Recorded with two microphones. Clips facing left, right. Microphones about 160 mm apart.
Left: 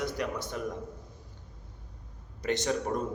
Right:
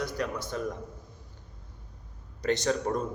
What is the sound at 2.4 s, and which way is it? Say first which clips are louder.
Speech: right 2 dB; 15° left (ahead or behind).